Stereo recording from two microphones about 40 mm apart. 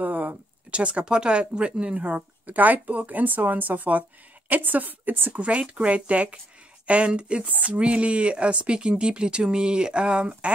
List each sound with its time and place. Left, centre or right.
0.0 s a sound: right
0.7 s a woman's voice: right
5.4 s speech: right